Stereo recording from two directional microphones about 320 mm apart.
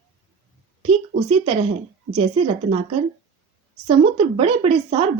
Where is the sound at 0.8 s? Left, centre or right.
Centre.